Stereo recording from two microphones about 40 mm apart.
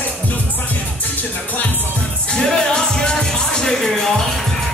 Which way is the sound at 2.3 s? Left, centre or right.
Left.